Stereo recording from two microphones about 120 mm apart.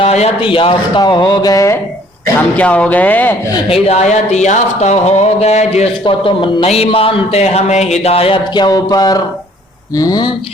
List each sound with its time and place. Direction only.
0.0 s a man's voice: 60° left (ahead or behind)
1.0 s a sound: 40° left (ahead or behind)
2.4 s speech: 10° left (ahead or behind)
3.7 s speech: 65° left (ahead or behind)
6.1 s speech: 45° left (ahead or behind)
8.5 s a sound: 35° left (ahead or behind)